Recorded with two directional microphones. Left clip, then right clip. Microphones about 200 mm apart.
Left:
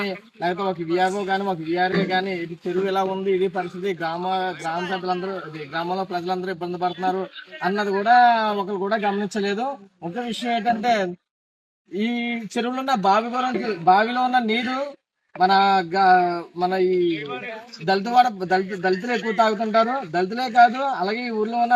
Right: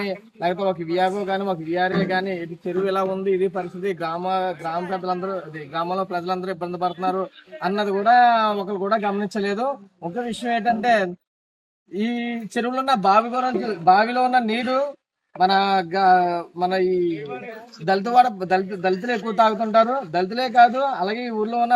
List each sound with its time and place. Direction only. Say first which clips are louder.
0.0 s a man's voice: right 1 dB; 15° right (ahead or behind)
4.9 s a man's voice: even; 5° right (ahead or behind)
5.2 s a man's voice: right 1 dB; 20° right (ahead or behind)
12.0 s a man's voice: left 1 dB; 15° right (ahead or behind)
17.8 s a man's voice: right 1 dB; 20° right (ahead or behind)